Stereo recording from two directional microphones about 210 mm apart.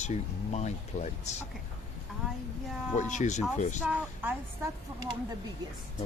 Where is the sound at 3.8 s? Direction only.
10° right (ahead or behind).